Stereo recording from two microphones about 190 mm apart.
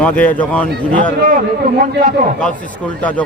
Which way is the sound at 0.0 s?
10° left (ahead or behind).